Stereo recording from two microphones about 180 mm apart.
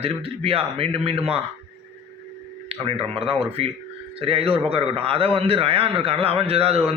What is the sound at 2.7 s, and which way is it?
A man's voice, 30° right (ahead or behind).